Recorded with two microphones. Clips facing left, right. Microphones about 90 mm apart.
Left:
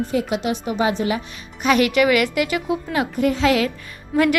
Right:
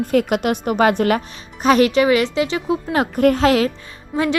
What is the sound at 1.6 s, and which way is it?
A woman's voice, 35° right (ahead or behind).